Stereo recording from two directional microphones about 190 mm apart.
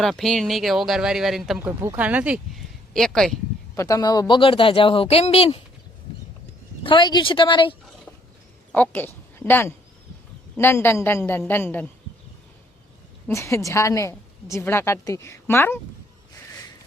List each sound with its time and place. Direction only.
0.0 s speech: centre (ahead or behind)
3.8 s speech: 15° left (ahead or behind)
6.8 s speech: 25° left (ahead or behind)
8.7 s a woman's voice: 10° left (ahead or behind)
13.2 s a woman's voice: 15° left (ahead or behind)